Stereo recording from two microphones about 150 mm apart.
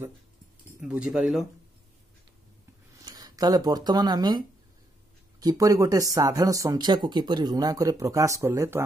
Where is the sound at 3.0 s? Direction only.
25° right (ahead or behind).